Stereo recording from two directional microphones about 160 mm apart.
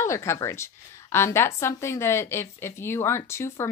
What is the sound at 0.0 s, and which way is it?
A woman's voice, 15° left (ahead or behind).